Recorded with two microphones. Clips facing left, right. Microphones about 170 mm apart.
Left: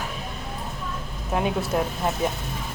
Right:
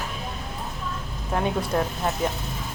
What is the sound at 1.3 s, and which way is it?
Speech, 5° left (ahead or behind).